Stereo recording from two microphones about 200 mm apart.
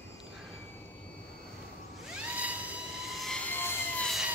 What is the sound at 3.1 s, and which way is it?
Vehicle, centre (ahead or behind).